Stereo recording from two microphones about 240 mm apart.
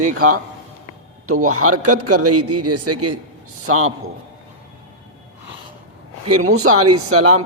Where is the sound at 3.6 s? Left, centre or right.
Right.